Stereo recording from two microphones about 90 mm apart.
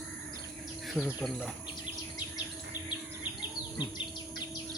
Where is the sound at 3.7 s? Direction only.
55° left (ahead or behind).